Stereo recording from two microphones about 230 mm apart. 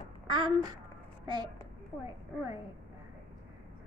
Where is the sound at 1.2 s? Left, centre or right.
Centre.